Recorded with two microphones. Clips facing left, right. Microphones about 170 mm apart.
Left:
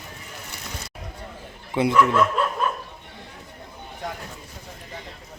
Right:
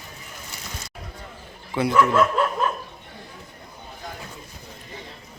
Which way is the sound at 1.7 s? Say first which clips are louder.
Left 2 dB; 20° left (ahead or behind).